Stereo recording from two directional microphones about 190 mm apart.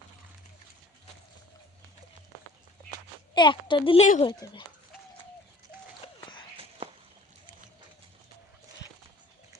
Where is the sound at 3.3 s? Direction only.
25° left (ahead or behind).